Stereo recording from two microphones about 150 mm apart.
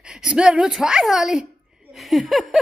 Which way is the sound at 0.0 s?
5° right (ahead or behind).